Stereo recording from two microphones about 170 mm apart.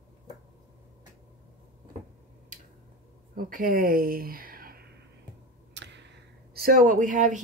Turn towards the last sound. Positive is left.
turn(degrees=-50)  # may be behind; listen again after turning